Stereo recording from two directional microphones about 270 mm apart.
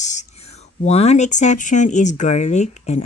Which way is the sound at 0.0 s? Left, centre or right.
Left.